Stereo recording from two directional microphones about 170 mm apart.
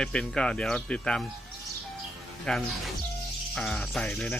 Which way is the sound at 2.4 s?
Centre (ahead or behind).